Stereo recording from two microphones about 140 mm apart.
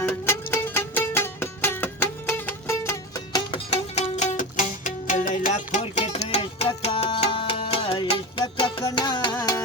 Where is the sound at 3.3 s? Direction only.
40° left (ahead or behind).